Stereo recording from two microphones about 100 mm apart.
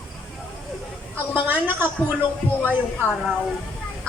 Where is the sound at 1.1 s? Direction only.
20° right (ahead or behind).